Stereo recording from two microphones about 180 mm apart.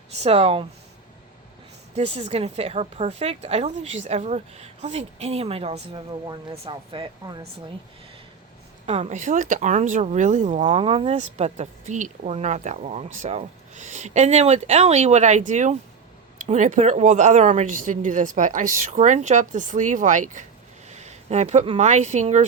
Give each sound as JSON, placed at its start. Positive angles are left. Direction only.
{"t": 0.2, "sound": "speech", "side_deg": -35}
{"t": 2.0, "sound": "speech", "side_deg": -35}
{"t": 8.9, "sound": "speech", "side_deg": -40}